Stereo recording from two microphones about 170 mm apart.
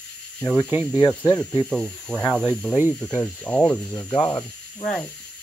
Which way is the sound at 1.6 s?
5° left (ahead or behind).